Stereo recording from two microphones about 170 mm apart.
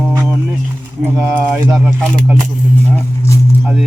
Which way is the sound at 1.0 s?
50° right (ahead or behind).